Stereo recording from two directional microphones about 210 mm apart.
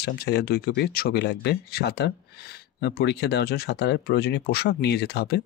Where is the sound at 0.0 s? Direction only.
50° left (ahead or behind).